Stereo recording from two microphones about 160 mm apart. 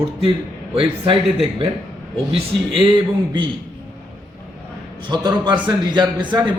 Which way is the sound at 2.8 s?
30° right (ahead or behind).